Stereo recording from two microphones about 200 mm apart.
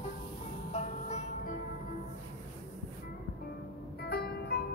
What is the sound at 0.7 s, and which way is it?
Music, 35° left (ahead or behind).